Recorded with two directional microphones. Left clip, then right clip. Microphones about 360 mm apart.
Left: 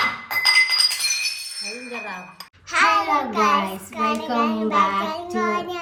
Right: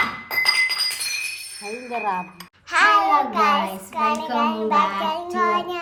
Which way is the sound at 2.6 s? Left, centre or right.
Centre.